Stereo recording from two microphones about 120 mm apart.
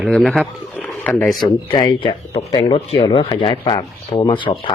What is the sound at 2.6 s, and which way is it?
Speech, 50° left (ahead or behind).